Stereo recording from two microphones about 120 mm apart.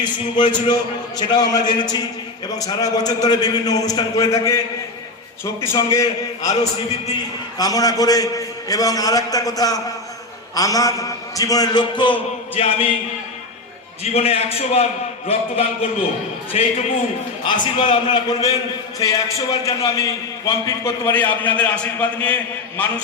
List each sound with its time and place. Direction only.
0.0 s a man's voice: 40° left (ahead or behind); by 4.6 s 25° left (ahead or behind)
5.7 s a man's voice: 25° left (ahead or behind)
7.6 s a man's voice: 30° left (ahead or behind); by 13.0 s 50° left (ahead or behind)
14.0 s a man's voice: 60° left (ahead or behind)
17.4 s a man's voice: 45° left (ahead or behind)
18.9 s a man's voice: 30° left (ahead or behind); by 22.4 s 10° left (ahead or behind)